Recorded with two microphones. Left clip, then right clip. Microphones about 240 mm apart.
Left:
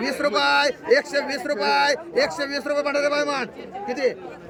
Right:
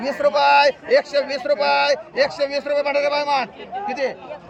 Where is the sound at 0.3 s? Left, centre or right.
Centre.